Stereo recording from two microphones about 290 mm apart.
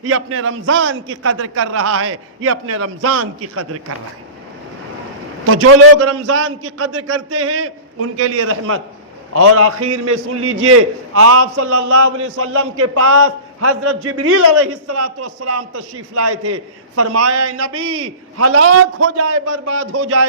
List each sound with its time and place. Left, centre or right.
0.0 s a man's voice: right
5.5 s a man's voice: right